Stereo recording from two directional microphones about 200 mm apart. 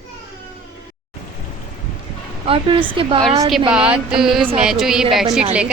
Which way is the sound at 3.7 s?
5° right (ahead or behind).